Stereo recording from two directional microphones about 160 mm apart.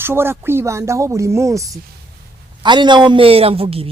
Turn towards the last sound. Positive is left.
turn(degrees=-35)  # may be behind; listen again after turning